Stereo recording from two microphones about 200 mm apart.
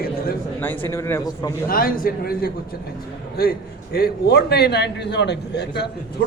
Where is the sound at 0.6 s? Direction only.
10° left (ahead or behind).